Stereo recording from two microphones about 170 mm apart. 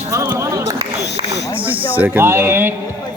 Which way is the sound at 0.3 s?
15° right (ahead or behind).